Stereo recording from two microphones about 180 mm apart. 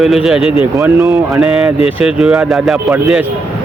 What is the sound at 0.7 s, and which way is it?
Speech, 15° right (ahead or behind).